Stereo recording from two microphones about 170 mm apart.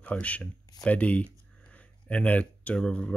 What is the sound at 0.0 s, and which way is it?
Speech, 10° left (ahead or behind).